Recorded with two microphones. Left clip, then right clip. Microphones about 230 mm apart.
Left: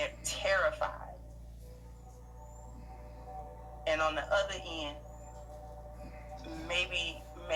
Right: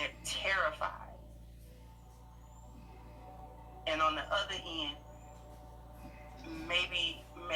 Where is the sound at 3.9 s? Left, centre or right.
Left.